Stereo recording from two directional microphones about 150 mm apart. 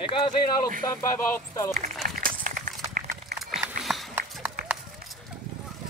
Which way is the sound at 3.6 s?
Centre (ahead or behind).